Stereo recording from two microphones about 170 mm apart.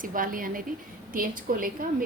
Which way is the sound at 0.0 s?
55° right (ahead or behind).